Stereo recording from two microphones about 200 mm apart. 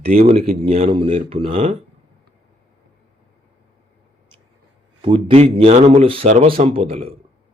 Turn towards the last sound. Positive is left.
turn(degrees=-30)  # may be behind; listen again after turning